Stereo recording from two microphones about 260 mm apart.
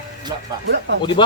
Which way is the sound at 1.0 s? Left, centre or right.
Centre.